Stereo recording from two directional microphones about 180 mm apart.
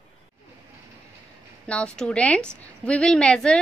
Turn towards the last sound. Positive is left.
turn(degrees=5)  # may be behind; listen again after turning